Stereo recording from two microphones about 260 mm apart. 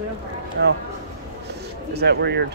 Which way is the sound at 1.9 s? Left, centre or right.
Right.